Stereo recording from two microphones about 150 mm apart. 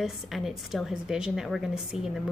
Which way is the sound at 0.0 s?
Centre (ahead or behind).